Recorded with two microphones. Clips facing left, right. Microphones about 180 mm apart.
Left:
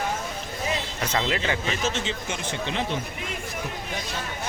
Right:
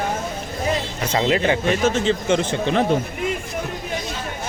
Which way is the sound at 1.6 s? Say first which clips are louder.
Right 9 dB; 55° right (ahead or behind).